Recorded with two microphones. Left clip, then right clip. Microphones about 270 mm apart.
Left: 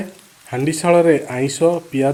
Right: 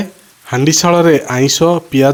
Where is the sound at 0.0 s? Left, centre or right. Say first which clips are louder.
Right 6 dB; right.